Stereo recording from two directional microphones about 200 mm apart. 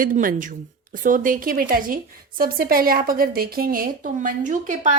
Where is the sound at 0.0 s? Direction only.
45° right (ahead or behind).